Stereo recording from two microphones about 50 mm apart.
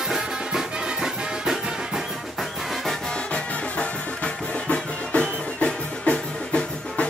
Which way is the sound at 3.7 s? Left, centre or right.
Left.